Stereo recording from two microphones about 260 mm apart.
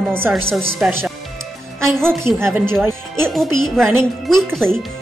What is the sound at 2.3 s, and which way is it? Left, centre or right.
Speech, centre.